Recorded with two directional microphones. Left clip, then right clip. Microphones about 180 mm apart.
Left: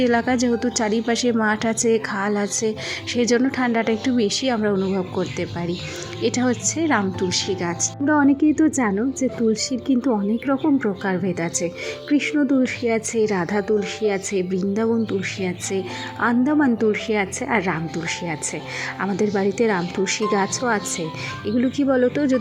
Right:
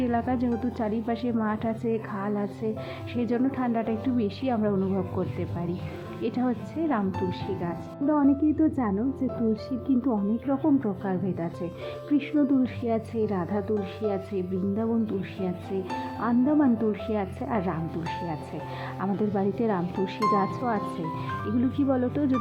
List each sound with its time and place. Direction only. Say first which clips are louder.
0.0 s a woman's voice: left 8 dB; 25° left (ahead or behind)
10.1 s a woman's voice: left 6 dB; 20° left (ahead or behind)
19.0 s a woman's voice: left 6 dB; 20° left (ahead or behind)